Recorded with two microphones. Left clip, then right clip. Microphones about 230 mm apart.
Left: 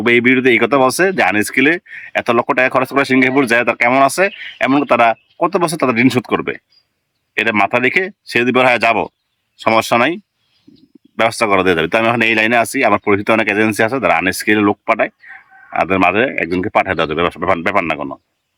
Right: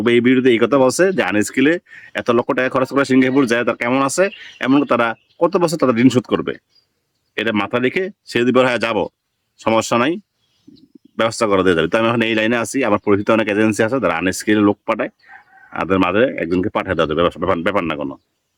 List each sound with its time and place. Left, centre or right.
0.0 s speech: centre
11.2 s speech: centre